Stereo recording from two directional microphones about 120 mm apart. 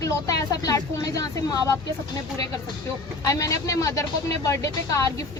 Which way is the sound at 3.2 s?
30° left (ahead or behind).